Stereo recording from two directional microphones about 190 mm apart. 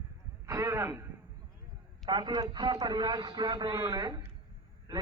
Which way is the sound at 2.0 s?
25° right (ahead or behind).